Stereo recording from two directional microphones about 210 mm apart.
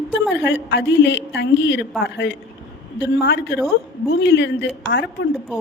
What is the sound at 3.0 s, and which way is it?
A woman's voice, 60° left (ahead or behind).